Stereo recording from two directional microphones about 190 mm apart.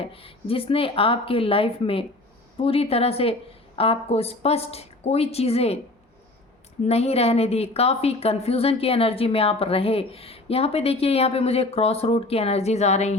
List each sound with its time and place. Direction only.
0.0 s a woman's voice: 30° left (ahead or behind)
6.8 s a woman's voice: 35° left (ahead or behind)